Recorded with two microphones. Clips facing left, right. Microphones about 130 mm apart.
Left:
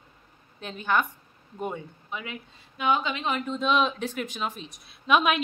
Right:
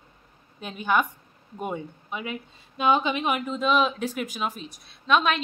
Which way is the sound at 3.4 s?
5° right (ahead or behind).